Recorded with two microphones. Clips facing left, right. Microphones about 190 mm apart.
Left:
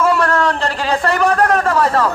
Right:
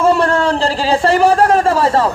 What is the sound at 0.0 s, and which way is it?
A man's voice, 30° right (ahead or behind).